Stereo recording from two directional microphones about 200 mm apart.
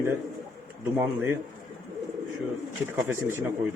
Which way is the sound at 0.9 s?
15° right (ahead or behind).